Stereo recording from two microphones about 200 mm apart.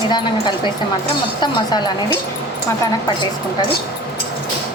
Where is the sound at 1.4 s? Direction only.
20° left (ahead or behind).